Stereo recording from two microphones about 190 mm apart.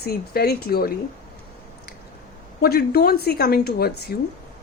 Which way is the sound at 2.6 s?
55° left (ahead or behind).